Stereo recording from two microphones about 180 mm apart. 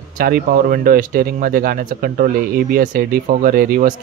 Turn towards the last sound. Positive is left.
turn(degrees=-50)  # may be behind; listen again after turning